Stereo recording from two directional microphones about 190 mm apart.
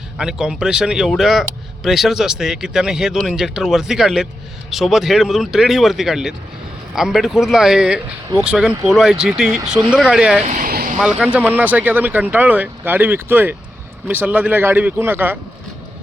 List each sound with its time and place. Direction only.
0.2 s speech: 5° right (ahead or behind)
10.4 s speech: 40° right (ahead or behind)
11.0 s speech: 5° right (ahead or behind)